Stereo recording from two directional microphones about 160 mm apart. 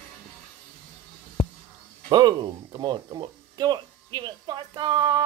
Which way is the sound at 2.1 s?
30° right (ahead or behind).